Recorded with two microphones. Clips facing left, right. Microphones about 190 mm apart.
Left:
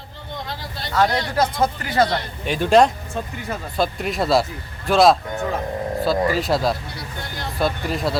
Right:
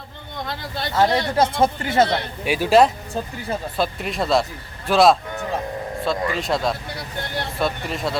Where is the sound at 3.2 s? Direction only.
35° right (ahead or behind).